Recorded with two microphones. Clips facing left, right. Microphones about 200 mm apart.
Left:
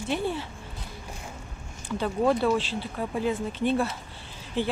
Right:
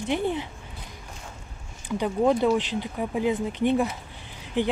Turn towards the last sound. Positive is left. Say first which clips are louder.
# right 3 dB
turn(degrees=-15)  # may be behind; listen again after turning